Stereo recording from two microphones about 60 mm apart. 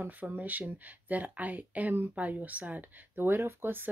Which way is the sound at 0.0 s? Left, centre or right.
Right.